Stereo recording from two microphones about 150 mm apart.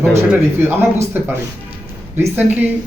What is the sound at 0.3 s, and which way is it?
Speech, 15° right (ahead or behind).